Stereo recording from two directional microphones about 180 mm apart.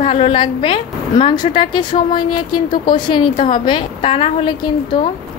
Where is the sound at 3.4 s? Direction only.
50° left (ahead or behind).